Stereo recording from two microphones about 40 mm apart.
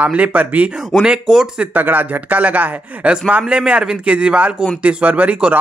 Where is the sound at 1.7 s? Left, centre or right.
Right.